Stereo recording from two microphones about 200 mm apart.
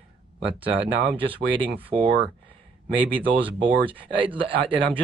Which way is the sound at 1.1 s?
25° right (ahead or behind).